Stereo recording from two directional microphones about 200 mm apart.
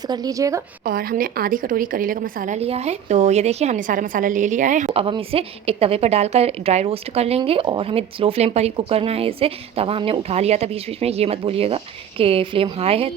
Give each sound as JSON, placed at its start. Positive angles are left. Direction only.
{"t": 0.1, "sound": "a woman's voice", "side_deg": -20}
{"t": 0.9, "sound": "a woman's voice", "side_deg": -45}
{"t": 4.9, "sound": "a woman's voice", "side_deg": -25}